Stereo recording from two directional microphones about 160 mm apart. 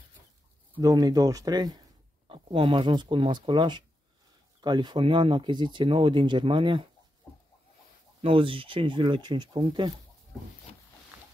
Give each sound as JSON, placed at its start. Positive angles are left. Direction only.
{"t": 0.7, "sound": "speech", "side_deg": -25}
{"t": 8.2, "sound": "speech", "side_deg": -35}